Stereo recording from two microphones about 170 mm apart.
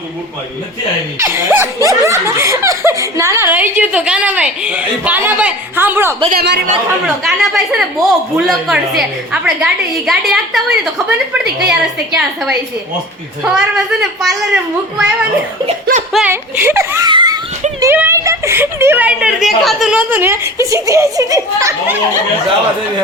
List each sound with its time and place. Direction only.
1.2 s speech: 15° right (ahead or behind)
6.3 s speech: 80° right
7.3 s a woman's voice: centre (ahead or behind)
16.1 s speech: 10° right (ahead or behind)
17.1 s giggle: 25° right (ahead or behind)
17.7 s a woman's voice: 15° right (ahead or behind)